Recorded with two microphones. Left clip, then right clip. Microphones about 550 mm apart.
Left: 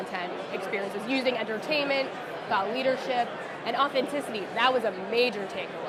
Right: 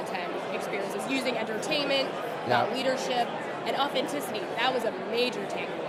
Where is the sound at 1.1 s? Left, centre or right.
Left.